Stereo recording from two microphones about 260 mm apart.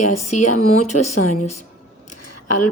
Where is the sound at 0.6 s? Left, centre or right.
Left.